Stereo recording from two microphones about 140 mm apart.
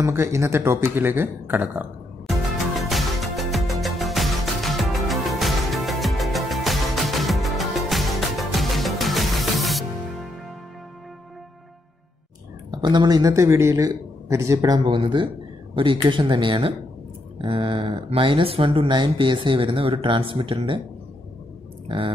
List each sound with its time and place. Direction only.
0.0 s speech: 20° right (ahead or behind)
2.2 s music: centre (ahead or behind)
12.7 s speech: 30° right (ahead or behind)
21.8 s speech: 40° right (ahead or behind)